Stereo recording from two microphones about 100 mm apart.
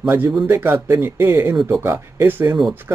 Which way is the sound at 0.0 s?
25° right (ahead or behind).